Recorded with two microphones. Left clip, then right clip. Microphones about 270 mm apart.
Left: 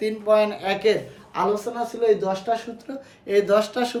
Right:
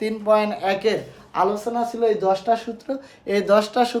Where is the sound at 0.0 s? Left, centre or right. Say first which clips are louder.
Even; centre.